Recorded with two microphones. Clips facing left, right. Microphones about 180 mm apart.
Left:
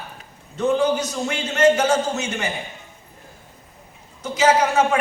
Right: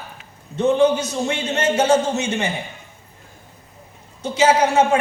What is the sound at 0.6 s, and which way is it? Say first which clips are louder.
A woman's voice: right 3 dB; 25° right (ahead or behind).